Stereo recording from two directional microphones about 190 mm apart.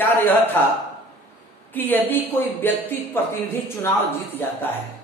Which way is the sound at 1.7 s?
10° left (ahead or behind).